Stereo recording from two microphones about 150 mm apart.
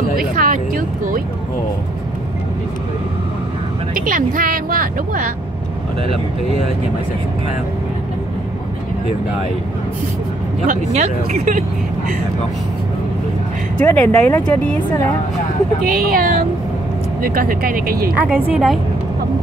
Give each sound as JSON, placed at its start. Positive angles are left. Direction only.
{"t": 0.4, "sound": "speech", "side_deg": -70}
{"t": 3.9, "sound": "speech", "side_deg": -65}
{"t": 11.3, "sound": "speech", "side_deg": -65}
{"t": 13.7, "sound": "speech", "side_deg": 10}
{"t": 15.8, "sound": "speech", "side_deg": -70}
{"t": 18.1, "sound": "a woman's voice", "side_deg": -5}